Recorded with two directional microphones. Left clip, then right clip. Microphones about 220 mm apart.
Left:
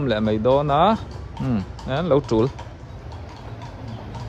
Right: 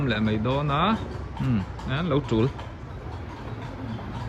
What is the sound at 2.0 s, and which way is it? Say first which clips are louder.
Speech: left 6 dB; 45° left (ahead or behind).